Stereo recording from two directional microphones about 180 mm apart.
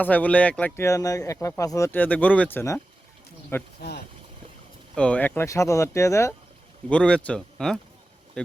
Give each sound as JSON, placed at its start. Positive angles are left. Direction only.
{"t": 0.0, "sound": "speech", "side_deg": 10}
{"t": 3.8, "sound": "speech", "side_deg": 65}
{"t": 4.9, "sound": "speech", "side_deg": 5}
{"t": 6.8, "sound": "speech", "side_deg": 5}